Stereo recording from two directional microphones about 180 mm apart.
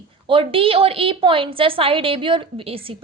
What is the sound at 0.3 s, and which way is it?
A woman's voice, 30° right (ahead or behind).